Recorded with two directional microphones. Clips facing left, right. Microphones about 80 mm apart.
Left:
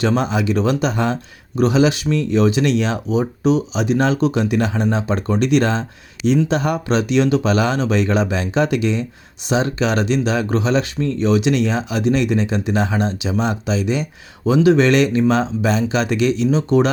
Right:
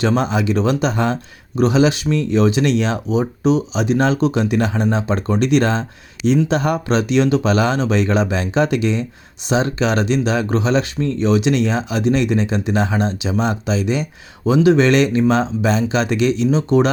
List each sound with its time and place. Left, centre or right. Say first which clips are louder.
0.0 s speech: right 1 dB; right
1.5 s speech: even; right
14.5 s speech: even; right